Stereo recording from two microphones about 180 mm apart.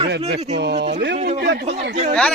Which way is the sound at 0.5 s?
70° right (ahead or behind).